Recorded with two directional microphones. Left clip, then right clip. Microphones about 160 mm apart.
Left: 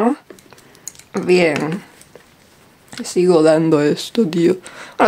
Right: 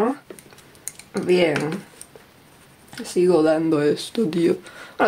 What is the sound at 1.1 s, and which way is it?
Speech, 35° left (ahead or behind).